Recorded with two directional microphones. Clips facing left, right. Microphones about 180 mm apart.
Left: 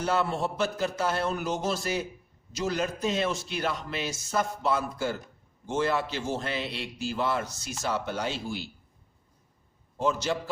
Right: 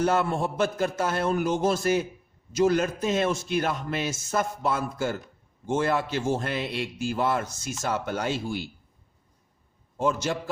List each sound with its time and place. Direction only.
0.0 s a man's voice: 50° right (ahead or behind)
10.0 s a man's voice: 50° right (ahead or behind)